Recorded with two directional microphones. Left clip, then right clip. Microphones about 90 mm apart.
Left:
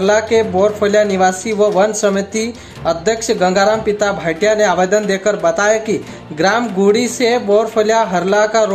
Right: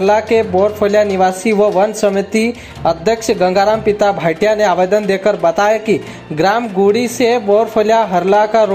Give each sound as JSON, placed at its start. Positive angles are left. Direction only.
{"t": 0.0, "sound": "a woman's voice", "side_deg": -45}